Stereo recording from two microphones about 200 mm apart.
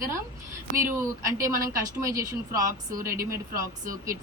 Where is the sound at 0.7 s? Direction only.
15° right (ahead or behind).